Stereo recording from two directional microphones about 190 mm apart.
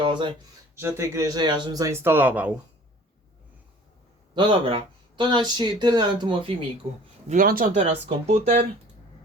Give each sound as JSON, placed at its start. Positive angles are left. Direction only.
{"t": 0.0, "sound": "speech", "side_deg": -25}
{"t": 4.4, "sound": "speech", "side_deg": -25}
{"t": 7.3, "sound": "speech", "side_deg": -45}